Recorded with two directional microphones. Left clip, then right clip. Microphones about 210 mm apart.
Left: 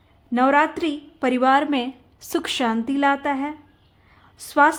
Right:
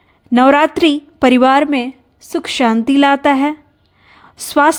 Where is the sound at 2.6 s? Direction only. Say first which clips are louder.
Right 10 dB; 35° right (ahead or behind).